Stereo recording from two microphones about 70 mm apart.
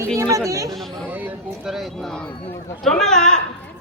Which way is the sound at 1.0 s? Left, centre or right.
Right.